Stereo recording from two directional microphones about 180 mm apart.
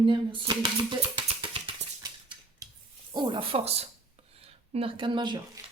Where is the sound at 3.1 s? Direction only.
25° right (ahead or behind).